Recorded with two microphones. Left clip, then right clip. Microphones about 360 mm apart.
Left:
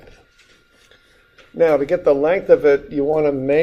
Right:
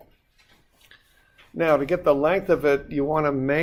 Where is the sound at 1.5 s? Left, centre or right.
Right.